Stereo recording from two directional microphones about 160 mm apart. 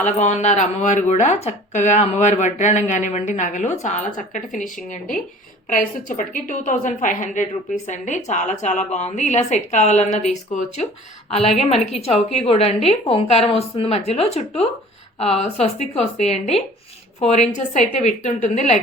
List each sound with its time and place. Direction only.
0.0 s speech: 50° left (ahead or behind)
11.3 s a woman's voice: 40° left (ahead or behind)